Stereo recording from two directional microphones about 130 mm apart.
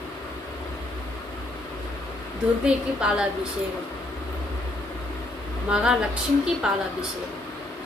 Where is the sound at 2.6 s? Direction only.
5° right (ahead or behind).